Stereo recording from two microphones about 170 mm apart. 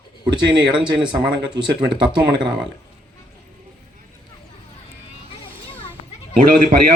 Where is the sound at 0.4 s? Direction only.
25° right (ahead or behind).